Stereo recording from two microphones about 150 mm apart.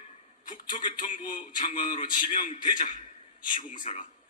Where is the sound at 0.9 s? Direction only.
60° left (ahead or behind).